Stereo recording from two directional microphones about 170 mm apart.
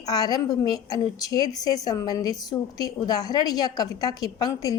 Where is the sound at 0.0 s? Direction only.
20° left (ahead or behind).